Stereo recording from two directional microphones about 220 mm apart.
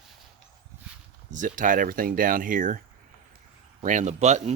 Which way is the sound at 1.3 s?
35° right (ahead or behind).